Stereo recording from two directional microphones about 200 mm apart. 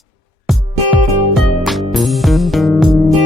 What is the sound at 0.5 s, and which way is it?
Music, centre (ahead or behind).